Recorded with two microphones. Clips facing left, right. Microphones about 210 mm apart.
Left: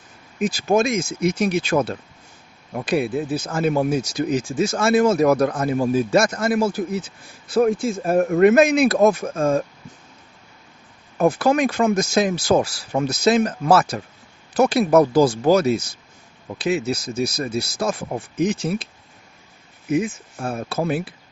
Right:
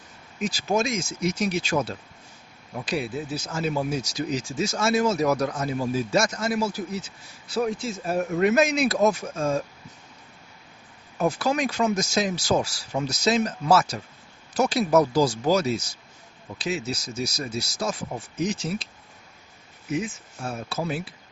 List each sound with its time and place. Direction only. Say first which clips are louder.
0.3 s speech: left 6 dB; 55° left (ahead or behind)
11.2 s speech: left 6 dB; 55° left (ahead or behind)
19.9 s speech: left 7 dB; 55° left (ahead or behind)